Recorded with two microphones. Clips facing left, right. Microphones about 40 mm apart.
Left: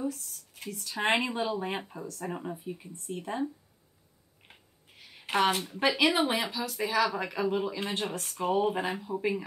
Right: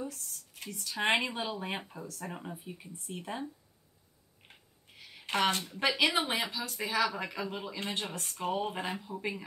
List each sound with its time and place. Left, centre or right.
0.0 s speech: centre
4.5 s a sound: centre
5.7 s speech: centre